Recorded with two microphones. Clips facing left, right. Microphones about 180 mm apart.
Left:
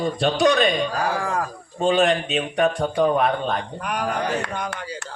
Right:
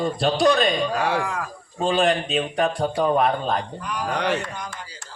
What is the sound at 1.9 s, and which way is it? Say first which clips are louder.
A man's voice: left 1 dB; 35° right (ahead or behind).